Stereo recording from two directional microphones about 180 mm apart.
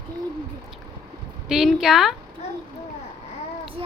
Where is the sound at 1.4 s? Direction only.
5° right (ahead or behind).